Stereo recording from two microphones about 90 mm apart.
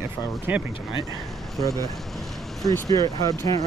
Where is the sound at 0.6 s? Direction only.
Centre (ahead or behind).